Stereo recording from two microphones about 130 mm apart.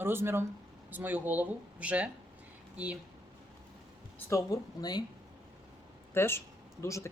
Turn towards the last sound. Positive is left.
turn(degrees=25)  # may be behind; listen again after turning